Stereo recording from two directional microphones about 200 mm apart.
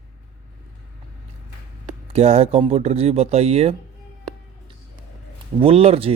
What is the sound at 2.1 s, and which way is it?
Speech, 30° right (ahead or behind).